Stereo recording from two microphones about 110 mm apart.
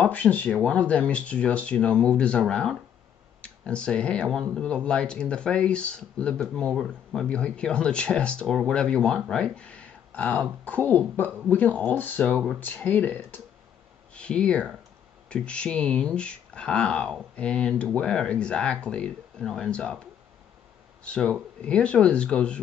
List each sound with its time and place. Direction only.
0.0 s speech: 15° left (ahead or behind)
21.0 s speech: 10° left (ahead or behind)